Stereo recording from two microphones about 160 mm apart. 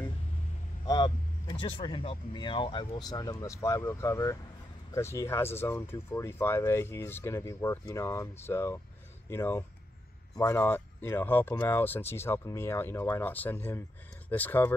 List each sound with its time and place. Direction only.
0.8 s speech: 25° left (ahead or behind); by 14.7 s 10° left (ahead or behind)